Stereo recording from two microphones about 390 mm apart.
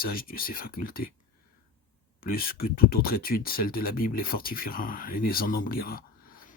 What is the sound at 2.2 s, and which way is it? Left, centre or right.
Speech, left.